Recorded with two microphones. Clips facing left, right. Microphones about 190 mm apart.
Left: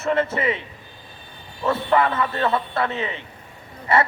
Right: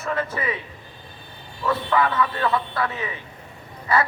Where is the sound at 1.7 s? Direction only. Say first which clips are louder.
Left 2 dB; 25° left (ahead or behind).